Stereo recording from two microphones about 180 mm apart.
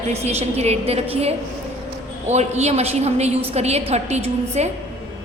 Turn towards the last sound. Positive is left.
turn(degrees=-40)  # may be behind; listen again after turning